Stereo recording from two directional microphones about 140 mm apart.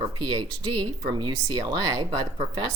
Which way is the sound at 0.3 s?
30° right (ahead or behind).